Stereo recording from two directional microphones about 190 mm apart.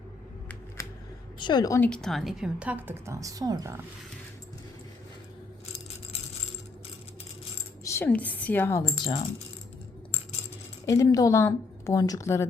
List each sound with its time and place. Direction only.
1.4 s a woman's voice: 25° left (ahead or behind)
1.9 s speech: centre (ahead or behind); by 3.8 s 20° right (ahead or behind)
7.9 s a woman's voice: 10° left (ahead or behind)
10.8 s a woman's voice: 20° left (ahead or behind)